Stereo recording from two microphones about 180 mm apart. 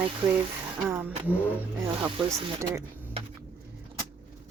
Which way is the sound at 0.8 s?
10° right (ahead or behind).